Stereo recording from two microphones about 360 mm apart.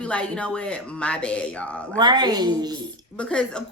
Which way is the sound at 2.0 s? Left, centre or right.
Centre.